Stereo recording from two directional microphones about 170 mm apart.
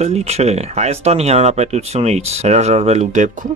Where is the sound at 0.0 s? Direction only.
40° right (ahead or behind).